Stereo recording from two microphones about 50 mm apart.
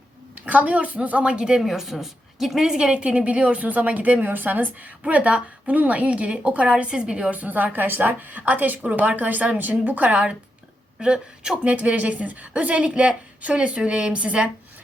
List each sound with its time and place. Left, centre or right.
0.4 s speech: right
7.3 s a woman's voice: right
11.0 s speech: centre